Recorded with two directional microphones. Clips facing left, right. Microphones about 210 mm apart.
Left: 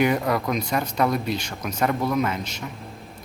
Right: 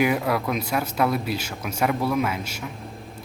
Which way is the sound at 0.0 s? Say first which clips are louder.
Left 1 dB; 5° right (ahead or behind).